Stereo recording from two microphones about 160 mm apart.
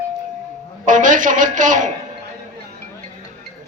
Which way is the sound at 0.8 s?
55° right (ahead or behind).